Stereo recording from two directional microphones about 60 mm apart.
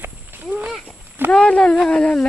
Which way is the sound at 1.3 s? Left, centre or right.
Centre.